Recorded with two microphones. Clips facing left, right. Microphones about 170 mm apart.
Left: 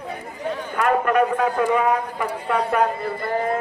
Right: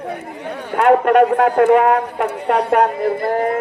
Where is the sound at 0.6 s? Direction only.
75° right (ahead or behind).